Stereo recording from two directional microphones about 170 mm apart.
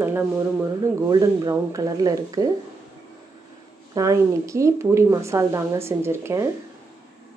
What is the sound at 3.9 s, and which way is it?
Speech, 20° right (ahead or behind).